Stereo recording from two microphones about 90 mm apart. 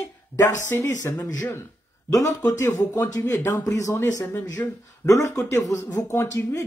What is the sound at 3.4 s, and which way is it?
Speech, 25° left (ahead or behind).